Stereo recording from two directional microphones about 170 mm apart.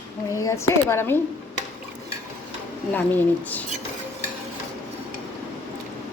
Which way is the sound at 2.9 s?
10° left (ahead or behind).